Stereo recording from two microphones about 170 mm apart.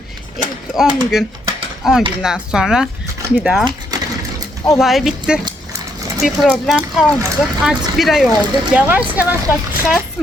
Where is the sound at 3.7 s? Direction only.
20° right (ahead or behind).